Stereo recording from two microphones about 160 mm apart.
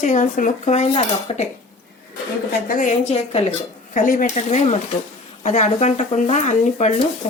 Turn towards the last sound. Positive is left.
turn(degrees=45)  # may be behind; listen again after turning